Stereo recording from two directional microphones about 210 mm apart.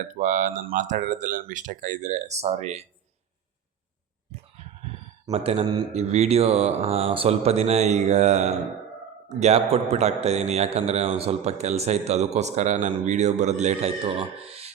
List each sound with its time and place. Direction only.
0.1 s a man's voice: 35° right (ahead or behind)
5.3 s a man's voice: 30° right (ahead or behind)